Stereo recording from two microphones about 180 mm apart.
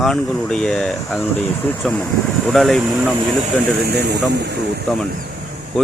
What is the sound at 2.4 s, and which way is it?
Speech, centre (ahead or behind).